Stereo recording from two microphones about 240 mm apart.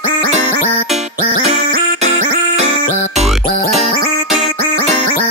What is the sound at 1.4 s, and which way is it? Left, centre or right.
Music, right.